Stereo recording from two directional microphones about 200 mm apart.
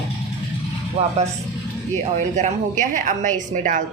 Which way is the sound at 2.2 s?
40° right (ahead or behind).